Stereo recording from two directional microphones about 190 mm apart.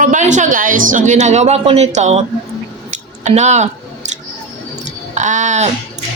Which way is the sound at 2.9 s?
40° right (ahead or behind).